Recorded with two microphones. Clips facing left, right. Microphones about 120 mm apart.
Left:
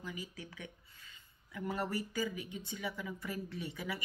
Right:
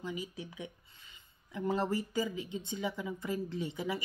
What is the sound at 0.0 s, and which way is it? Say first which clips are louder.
Speech: right 5 dB; 20° right (ahead or behind).